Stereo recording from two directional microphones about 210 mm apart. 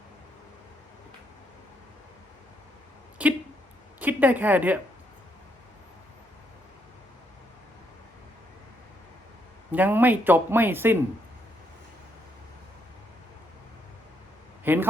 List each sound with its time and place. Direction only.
3.2 s speech: 5° right (ahead or behind)
9.7 s speech: 10° right (ahead or behind)
14.6 s a sound: 10° right (ahead or behind)